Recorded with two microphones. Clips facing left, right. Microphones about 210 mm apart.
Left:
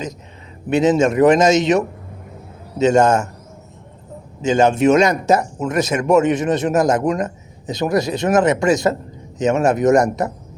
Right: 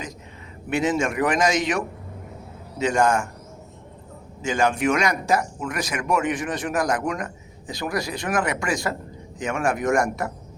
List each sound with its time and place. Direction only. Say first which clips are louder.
0.7 s speech: left 8 dB; 20° left (ahead or behind)
4.4 s speech: left 8 dB; 25° left (ahead or behind)